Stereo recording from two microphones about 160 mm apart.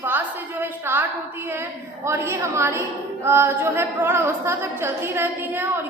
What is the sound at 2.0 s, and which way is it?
Speech, 15° right (ahead or behind).